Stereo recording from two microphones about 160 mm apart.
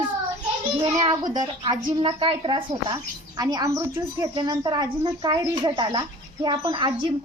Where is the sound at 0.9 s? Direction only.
25° right (ahead or behind).